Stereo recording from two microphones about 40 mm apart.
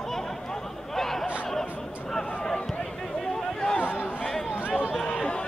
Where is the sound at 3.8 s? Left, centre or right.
Left.